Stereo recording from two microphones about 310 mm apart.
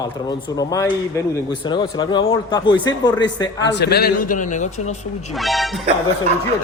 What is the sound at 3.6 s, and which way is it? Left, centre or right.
A man's voice, left.